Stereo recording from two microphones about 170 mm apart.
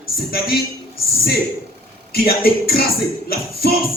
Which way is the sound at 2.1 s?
65° left (ahead or behind).